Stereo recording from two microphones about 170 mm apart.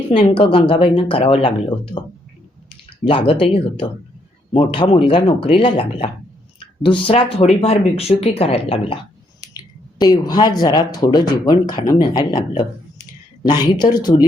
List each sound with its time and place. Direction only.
0.1 s speech: 30° left (ahead or behind)
3.0 s speech: 30° left (ahead or behind)
13.5 s speech: 25° left (ahead or behind)